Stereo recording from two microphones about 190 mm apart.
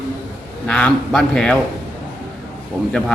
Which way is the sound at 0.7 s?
5° left (ahead or behind).